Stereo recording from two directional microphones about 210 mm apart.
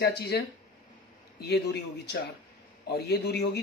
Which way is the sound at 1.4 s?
50° left (ahead or behind).